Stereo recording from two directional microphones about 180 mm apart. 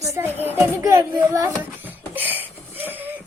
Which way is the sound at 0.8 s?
15° right (ahead or behind).